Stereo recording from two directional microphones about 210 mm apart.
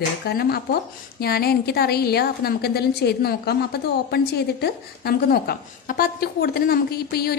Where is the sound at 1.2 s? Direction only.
50° left (ahead or behind).